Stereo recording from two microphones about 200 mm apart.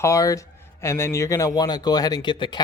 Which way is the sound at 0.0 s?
15° left (ahead or behind).